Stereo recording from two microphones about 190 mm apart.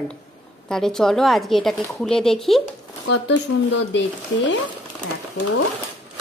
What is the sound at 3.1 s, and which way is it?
Speech, 65° left (ahead or behind).